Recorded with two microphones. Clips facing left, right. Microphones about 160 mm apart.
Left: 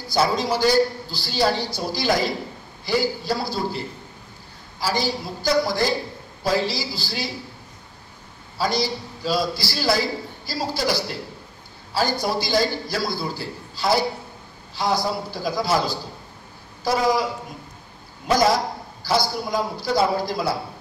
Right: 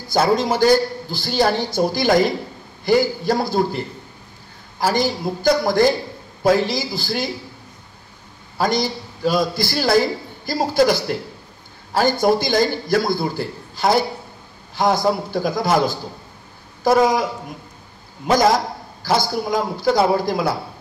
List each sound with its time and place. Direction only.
0.1 s a man's voice: 50° right (ahead or behind)
8.5 s a man's voice: 50° right (ahead or behind)
15.0 s a man's voice: 50° right (ahead or behind)
19.0 s a man's voice: 50° right (ahead or behind)